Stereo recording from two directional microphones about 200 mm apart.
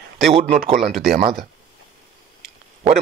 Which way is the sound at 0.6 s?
35° right (ahead or behind).